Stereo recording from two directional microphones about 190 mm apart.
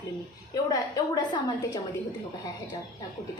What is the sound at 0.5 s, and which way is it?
A woman's voice, 20° left (ahead or behind).